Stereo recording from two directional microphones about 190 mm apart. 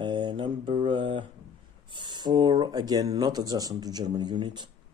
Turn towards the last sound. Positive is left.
turn(degrees=-25)  # may be behind; listen again after turning